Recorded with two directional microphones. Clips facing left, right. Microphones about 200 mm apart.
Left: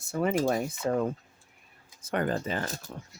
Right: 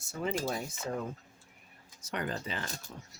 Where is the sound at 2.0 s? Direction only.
50° left (ahead or behind).